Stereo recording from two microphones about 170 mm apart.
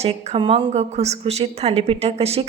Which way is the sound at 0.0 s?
35° right (ahead or behind).